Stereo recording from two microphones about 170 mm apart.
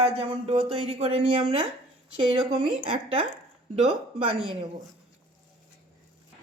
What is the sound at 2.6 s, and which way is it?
Speech, 35° right (ahead or behind).